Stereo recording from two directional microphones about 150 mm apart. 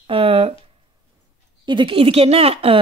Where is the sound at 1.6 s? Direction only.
30° right (ahead or behind).